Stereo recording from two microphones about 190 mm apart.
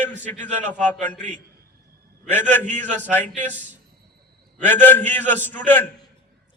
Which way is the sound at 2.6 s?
40° right (ahead or behind).